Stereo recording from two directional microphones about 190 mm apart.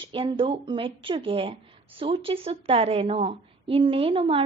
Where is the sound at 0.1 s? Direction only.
25° right (ahead or behind).